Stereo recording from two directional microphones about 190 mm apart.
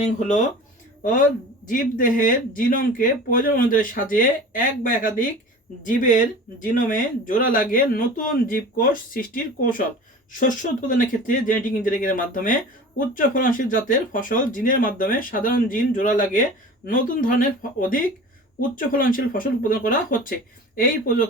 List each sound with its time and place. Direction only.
0.0 s speech: 40° left (ahead or behind)